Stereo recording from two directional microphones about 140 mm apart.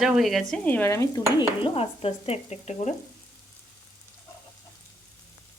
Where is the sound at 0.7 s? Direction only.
15° left (ahead or behind).